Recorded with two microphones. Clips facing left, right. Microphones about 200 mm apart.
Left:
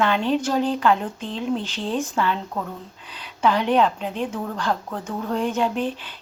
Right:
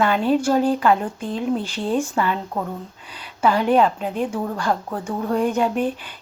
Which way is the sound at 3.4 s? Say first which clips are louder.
Right 2 dB; 5° right (ahead or behind).